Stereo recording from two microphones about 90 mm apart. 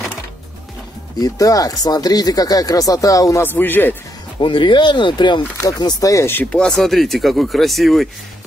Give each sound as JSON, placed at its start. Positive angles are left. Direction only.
{"t": 1.2, "sound": "speech", "side_deg": 40}
{"t": 3.4, "sound": "speech", "side_deg": 20}
{"t": 4.4, "sound": "speech", "side_deg": 65}
{"t": 5.6, "sound": "speech", "side_deg": 45}
{"t": 6.5, "sound": "speech", "side_deg": 5}